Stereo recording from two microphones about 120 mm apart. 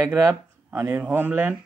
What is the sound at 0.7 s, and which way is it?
Speech, 15° right (ahead or behind).